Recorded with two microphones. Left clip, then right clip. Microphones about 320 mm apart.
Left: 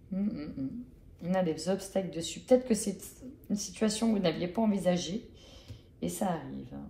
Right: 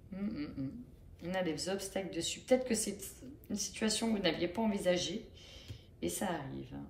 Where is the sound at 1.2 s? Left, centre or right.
Centre.